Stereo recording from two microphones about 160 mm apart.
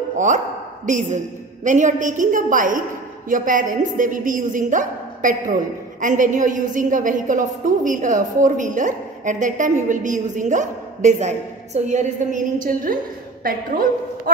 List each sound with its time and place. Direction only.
0.8 s a woman's voice: 50° right (ahead or behind)